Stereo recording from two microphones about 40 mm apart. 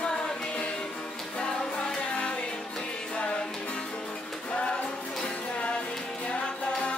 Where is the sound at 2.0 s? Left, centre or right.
Left.